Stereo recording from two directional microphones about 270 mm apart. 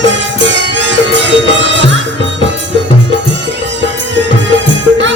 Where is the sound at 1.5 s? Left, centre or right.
Right.